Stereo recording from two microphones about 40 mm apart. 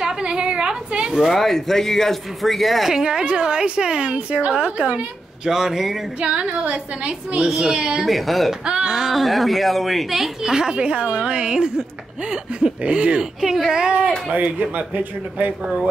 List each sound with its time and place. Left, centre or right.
0.0 s a sound: right
1.2 s speech: centre
2.9 s a woman's voice: centre
5.5 s speech: centre
6.2 s a woman's voice: right
8.1 s speech: centre
8.6 s speech: right
9.2 s speech: centre
10.4 s speech: centre
10.8 s a woman's voice: right
14.3 s speech: right